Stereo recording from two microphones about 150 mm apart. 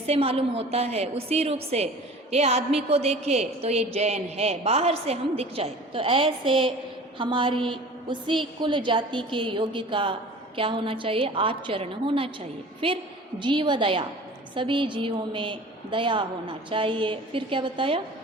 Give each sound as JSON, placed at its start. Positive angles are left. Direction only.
{"t": 0.0, "sound": "a woman's voice", "side_deg": -40}
{"t": 13.4, "sound": "a woman's voice", "side_deg": -30}